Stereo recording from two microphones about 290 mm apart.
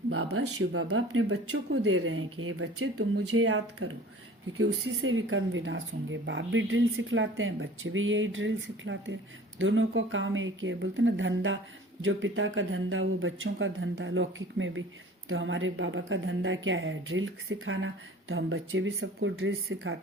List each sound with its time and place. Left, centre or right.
0.1 s a woman's voice: right